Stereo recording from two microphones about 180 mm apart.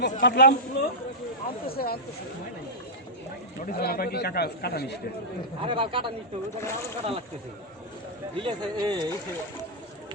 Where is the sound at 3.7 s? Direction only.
55° left (ahead or behind).